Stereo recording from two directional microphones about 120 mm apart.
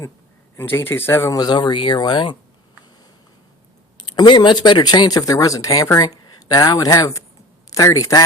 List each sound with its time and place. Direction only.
0.5 s speech: 20° left (ahead or behind); by 2.3 s 40° left (ahead or behind)
4.1 s speech: 35° left (ahead or behind)